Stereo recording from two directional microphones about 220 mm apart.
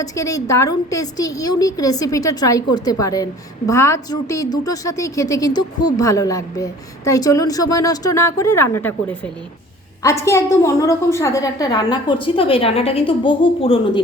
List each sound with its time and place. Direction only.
0.0 s a woman's voice: 15° left (ahead or behind)